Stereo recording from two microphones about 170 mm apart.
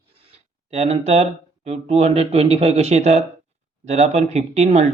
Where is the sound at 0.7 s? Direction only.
40° right (ahead or behind).